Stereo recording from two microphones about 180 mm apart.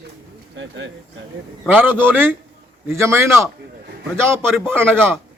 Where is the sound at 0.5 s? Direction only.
85° right.